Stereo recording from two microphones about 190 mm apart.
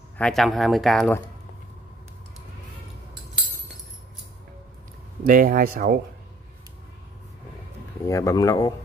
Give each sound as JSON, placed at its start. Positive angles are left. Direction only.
{"t": 0.2, "sound": "speech", "side_deg": 0}
{"t": 5.2, "sound": "speech", "side_deg": -45}
{"t": 8.1, "sound": "speech", "side_deg": 15}